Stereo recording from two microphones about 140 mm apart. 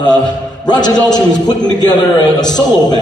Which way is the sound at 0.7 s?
30° left (ahead or behind).